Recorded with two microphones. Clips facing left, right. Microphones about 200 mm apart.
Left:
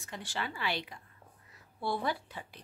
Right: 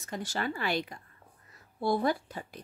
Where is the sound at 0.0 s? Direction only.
40° right (ahead or behind).